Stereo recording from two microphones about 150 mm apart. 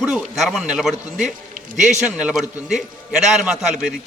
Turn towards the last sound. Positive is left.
turn(degrees=-5)  # may be behind; listen again after turning